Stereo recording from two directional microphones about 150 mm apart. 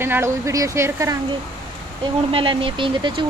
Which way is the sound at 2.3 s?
35° right (ahead or behind).